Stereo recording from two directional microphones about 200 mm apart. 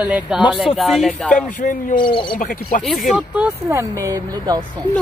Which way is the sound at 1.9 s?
25° left (ahead or behind).